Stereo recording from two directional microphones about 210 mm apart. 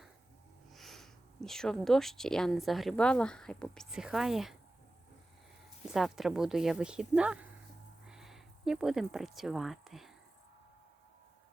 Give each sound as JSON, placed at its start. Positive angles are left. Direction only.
{"t": 0.7, "sound": "speech", "side_deg": 0}
{"t": 5.9, "sound": "speech", "side_deg": 0}